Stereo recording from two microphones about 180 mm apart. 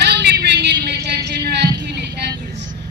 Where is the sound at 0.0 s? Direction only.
65° right (ahead or behind).